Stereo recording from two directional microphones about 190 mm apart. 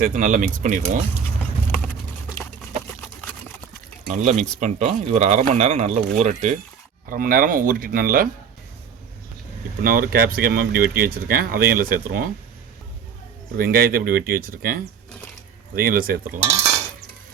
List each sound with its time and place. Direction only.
0.0 s speech: 45° right (ahead or behind)
4.1 s speech: 40° right (ahead or behind)
9.8 s speech: 50° right (ahead or behind)
13.6 s speech: 50° right (ahead or behind)